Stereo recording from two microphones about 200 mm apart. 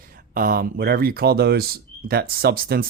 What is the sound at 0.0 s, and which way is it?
Speech, 45° right (ahead or behind).